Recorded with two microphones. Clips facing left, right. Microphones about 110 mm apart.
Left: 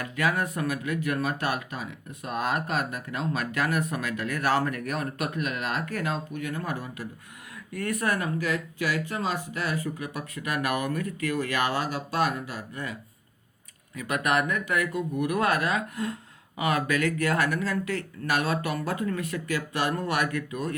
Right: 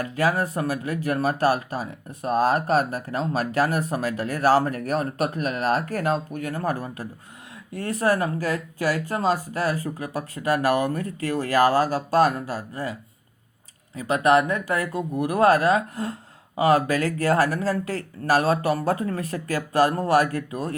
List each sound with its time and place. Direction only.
0.0 s speech: 35° right (ahead or behind)